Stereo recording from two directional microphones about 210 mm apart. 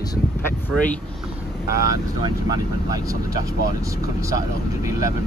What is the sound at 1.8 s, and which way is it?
Speech, 15° right (ahead or behind).